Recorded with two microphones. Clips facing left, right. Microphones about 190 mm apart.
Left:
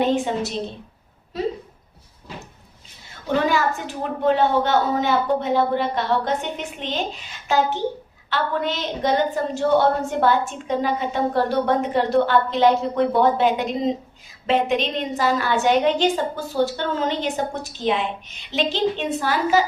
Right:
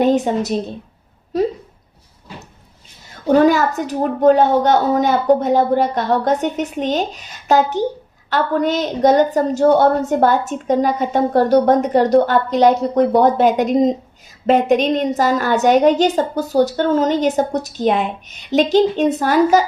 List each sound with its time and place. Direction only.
0.0 s a woman's voice: 40° right (ahead or behind)
3.2 s a woman's voice: 40° right (ahead or behind)